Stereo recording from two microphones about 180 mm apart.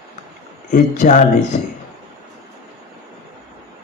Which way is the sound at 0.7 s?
45° left (ahead or behind).